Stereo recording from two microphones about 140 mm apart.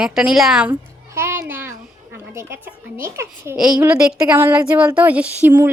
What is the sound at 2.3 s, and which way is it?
A woman's voice, 20° right (ahead or behind).